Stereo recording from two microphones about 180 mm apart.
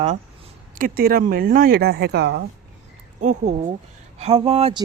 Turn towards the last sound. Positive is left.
turn(degrees=-30)  # may be behind; listen again after turning